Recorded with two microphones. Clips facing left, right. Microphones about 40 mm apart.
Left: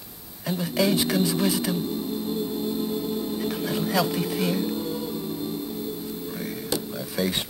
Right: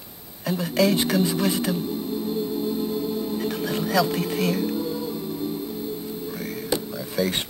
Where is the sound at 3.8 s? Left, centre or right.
Centre.